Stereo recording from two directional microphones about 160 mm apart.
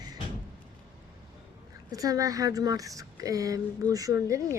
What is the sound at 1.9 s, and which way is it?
A woman's voice, 20° right (ahead or behind).